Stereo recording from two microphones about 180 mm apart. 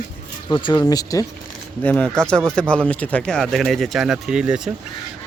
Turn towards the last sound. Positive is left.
turn(degrees=-5)  # may be behind; listen again after turning